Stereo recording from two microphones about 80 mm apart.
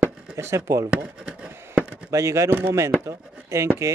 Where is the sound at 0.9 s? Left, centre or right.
Centre.